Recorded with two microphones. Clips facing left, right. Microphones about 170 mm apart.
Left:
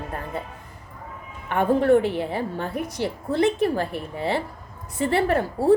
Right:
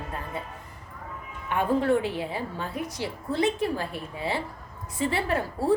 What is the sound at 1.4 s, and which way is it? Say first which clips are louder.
A woman's voice: left 5 dB; 60° left (ahead or behind).